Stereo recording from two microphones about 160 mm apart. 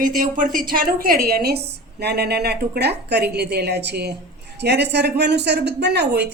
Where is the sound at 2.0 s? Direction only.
90° right.